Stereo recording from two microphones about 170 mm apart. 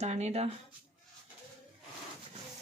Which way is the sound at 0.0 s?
40° right (ahead or behind).